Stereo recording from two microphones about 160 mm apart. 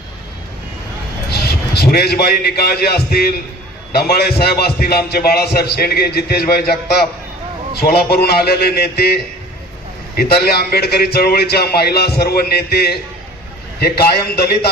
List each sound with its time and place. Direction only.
1.3 s a man's voice: 85° left